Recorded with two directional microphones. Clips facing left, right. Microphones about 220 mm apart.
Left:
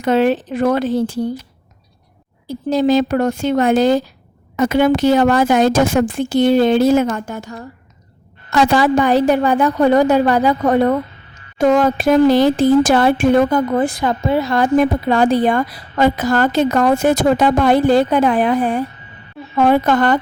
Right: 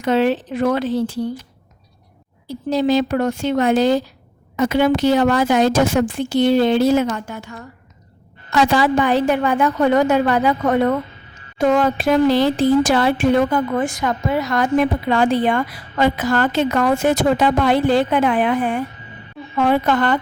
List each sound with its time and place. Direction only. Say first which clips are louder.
0.0 s speech: left 2 dB; 50° left (ahead or behind)
2.5 s a woman's voice: left 3 dB; 45° left (ahead or behind); by 14.7 s 30° left (ahead or behind)
14.8 s a woman's voice: left 2 dB; 40° left (ahead or behind)